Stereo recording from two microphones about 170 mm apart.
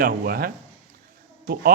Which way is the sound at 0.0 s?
60° right (ahead or behind).